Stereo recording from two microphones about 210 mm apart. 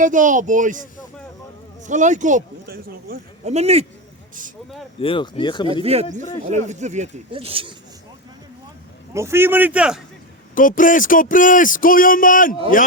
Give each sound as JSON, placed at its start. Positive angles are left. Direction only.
{"t": 0.0, "sound": "speech", "side_deg": -40}
{"t": 1.9, "sound": "speech", "side_deg": -35}
{"t": 3.4, "sound": "speech", "side_deg": -30}
{"t": 4.9, "sound": "speech", "side_deg": 25}
{"t": 5.8, "sound": "speech", "side_deg": -30}
{"t": 9.1, "sound": "a man's voice", "side_deg": -10}
{"t": 10.5, "sound": "speech", "side_deg": 40}